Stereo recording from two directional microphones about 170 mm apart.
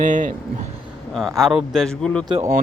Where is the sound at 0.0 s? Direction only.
50° right (ahead or behind).